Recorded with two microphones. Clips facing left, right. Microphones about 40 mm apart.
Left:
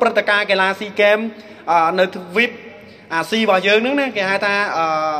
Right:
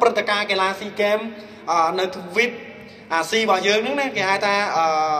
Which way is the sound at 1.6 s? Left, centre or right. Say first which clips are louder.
Left 5 dB; left.